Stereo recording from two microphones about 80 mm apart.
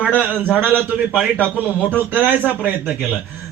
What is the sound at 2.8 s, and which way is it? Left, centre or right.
Speech, centre.